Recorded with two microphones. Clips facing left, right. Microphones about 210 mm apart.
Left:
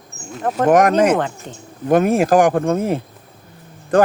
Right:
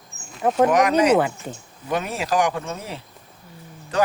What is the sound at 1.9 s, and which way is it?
Speech, 50° left (ahead or behind).